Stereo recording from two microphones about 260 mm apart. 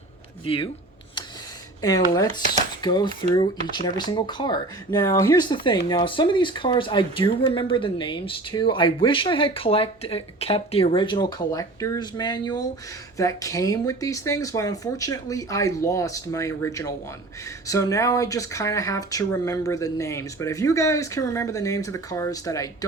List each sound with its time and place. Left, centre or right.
0.4 s speech: centre
1.8 s speech: centre